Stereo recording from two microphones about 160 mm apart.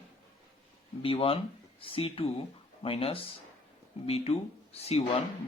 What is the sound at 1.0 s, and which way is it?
Speech, 35° left (ahead or behind).